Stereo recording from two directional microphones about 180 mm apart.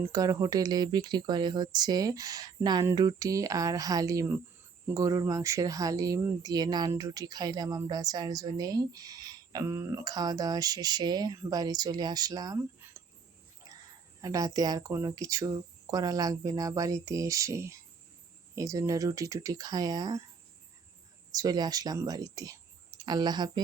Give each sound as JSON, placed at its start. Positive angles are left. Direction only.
{"t": 0.1, "sound": "speech", "side_deg": -20}
{"t": 14.2, "sound": "speech", "side_deg": -20}
{"t": 21.3, "sound": "speech", "side_deg": -20}